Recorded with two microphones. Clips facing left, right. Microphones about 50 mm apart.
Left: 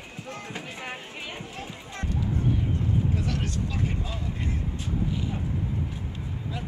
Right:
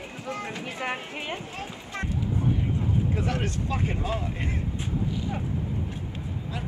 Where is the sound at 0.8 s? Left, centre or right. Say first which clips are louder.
Right 5 dB; right.